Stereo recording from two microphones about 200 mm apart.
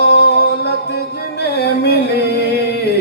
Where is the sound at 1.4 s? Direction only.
55° left (ahead or behind).